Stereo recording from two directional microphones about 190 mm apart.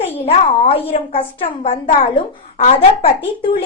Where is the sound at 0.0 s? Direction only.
35° left (ahead or behind).